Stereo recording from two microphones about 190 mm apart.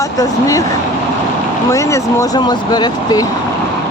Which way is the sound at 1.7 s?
15° left (ahead or behind).